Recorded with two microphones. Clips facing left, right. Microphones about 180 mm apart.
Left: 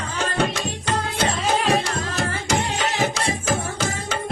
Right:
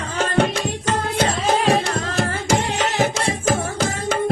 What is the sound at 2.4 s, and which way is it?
Music, 45° right (ahead or behind).